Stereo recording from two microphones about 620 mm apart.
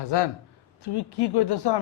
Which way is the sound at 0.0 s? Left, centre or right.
Left.